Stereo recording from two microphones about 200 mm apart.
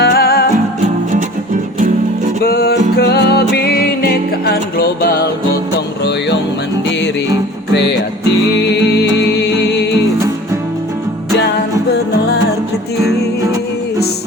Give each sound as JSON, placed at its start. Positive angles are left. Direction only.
{"t": 0.0, "sound": "music", "side_deg": 50}
{"t": 2.4, "sound": "music", "side_deg": 50}
{"t": 7.7, "sound": "music", "side_deg": 60}